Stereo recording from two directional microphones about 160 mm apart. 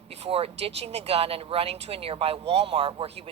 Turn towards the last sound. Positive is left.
turn(degrees=-40)  # may be behind; listen again after turning